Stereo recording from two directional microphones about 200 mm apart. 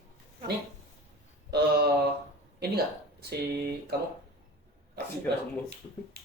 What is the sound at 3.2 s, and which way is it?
Speech, 55° right (ahead or behind).